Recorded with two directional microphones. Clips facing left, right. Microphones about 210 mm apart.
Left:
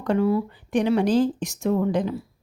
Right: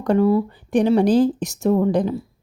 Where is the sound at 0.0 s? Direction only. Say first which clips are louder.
Right 4 dB; 35° right (ahead or behind).